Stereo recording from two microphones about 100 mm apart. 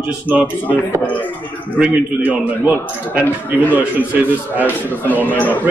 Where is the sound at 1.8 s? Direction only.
15° right (ahead or behind).